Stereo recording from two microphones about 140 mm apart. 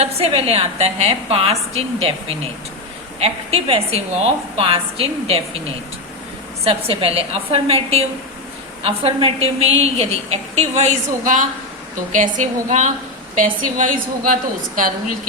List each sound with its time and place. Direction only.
0.0 s a woman's voice: 45° right (ahead or behind)
3.2 s a woman's voice: 45° right (ahead or behind)
6.7 s a woman's voice: 45° right (ahead or behind); by 14.3 s 70° right (ahead or behind)